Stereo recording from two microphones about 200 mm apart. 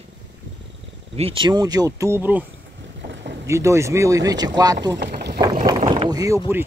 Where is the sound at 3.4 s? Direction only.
15° right (ahead or behind).